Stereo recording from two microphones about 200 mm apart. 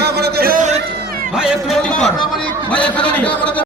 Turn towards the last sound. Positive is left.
turn(degrees=5)  # may be behind; listen again after turning